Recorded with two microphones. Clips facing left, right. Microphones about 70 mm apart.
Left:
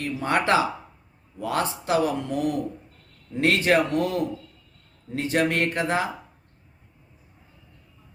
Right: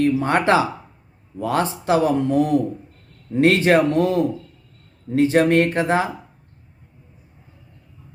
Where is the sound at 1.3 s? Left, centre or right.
Right.